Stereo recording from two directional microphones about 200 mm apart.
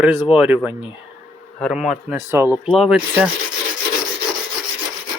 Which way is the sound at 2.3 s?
10° right (ahead or behind).